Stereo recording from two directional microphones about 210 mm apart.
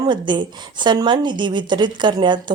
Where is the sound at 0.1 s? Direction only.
20° right (ahead or behind).